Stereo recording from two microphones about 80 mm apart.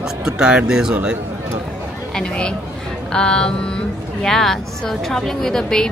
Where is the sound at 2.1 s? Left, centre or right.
Centre.